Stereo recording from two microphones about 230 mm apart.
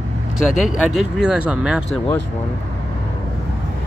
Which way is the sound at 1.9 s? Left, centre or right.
Centre.